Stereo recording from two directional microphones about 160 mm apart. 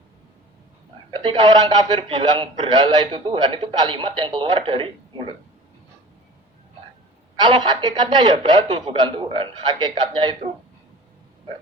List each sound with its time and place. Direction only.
1.2 s a man's voice: 30° right (ahead or behind)
7.3 s a man's voice: 30° right (ahead or behind)